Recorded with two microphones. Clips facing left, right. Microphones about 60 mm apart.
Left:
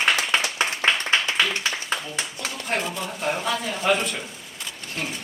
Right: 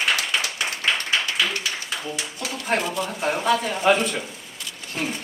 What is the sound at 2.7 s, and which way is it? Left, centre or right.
Speech, centre.